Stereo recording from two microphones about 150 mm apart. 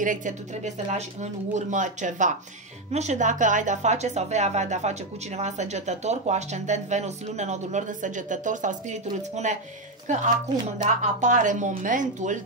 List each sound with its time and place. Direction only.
0.0 s speech: 60° right (ahead or behind)